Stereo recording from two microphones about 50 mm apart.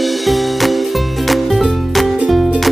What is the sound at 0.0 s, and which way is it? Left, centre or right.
Music, centre.